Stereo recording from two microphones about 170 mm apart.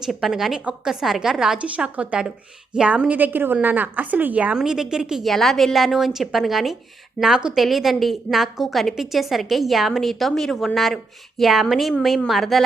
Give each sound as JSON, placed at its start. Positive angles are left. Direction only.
{"t": 0.0, "sound": "a woman's voice", "side_deg": 0}